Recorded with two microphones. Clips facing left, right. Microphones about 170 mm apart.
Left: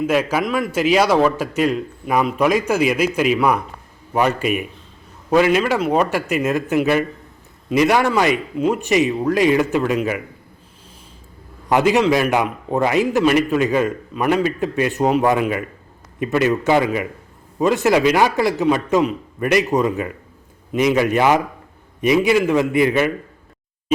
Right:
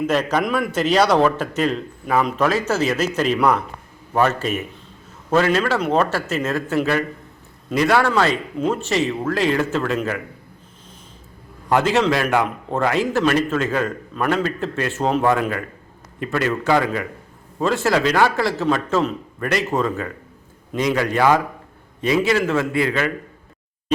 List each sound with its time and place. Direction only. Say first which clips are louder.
0.1 s a man's voice: left 1 dB; 10° left (ahead or behind)
11.7 s a man's voice: left 2 dB; 15° left (ahead or behind)